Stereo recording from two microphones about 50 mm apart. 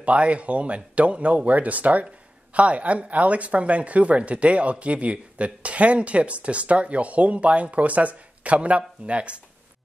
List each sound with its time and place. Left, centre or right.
0.0 s speech: right